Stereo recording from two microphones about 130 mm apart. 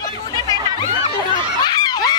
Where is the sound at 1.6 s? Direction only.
35° left (ahead or behind).